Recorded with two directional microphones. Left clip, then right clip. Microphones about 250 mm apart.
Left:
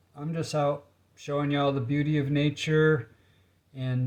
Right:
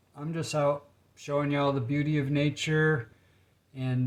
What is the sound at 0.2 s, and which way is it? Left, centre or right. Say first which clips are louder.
Speech: left 1 dB; centre.